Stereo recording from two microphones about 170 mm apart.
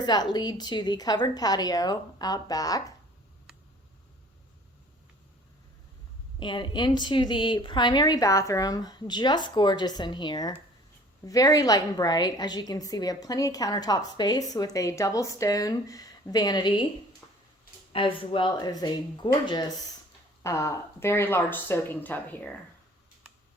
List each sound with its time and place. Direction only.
0.0 s a woman's voice: 25° left (ahead or behind)
6.4 s a woman's voice: 25° left (ahead or behind)
17.9 s a woman's voice: 30° left (ahead or behind); by 22.5 s 10° left (ahead or behind)